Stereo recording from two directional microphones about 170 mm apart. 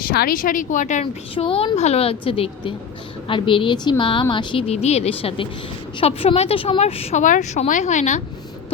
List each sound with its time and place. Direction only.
0.0 s a woman's voice: 60° left (ahead or behind); by 8.2 s 45° left (ahead or behind)